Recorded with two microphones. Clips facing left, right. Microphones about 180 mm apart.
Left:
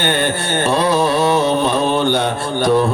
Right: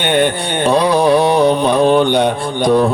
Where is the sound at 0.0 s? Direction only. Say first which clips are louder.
Right 4 dB; 15° right (ahead or behind).